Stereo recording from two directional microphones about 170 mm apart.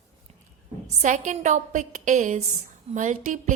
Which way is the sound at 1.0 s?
45° right (ahead or behind).